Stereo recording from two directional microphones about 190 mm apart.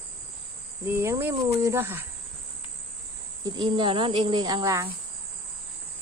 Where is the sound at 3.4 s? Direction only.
20° right (ahead or behind).